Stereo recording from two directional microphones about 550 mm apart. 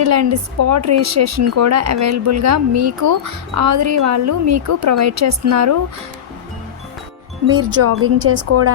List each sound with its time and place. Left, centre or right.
0.0 s a woman's voice: right
7.4 s a woman's voice: right